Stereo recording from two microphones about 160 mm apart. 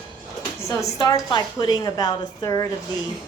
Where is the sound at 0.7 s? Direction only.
20° left (ahead or behind).